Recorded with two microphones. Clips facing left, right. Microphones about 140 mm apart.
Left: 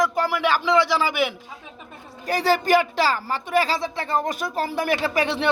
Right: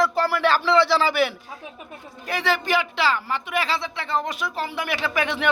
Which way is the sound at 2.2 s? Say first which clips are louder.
Left 4 dB; 40° left (ahead or behind).